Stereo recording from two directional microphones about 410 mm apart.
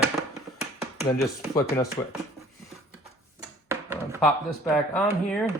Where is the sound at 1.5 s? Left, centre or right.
Centre.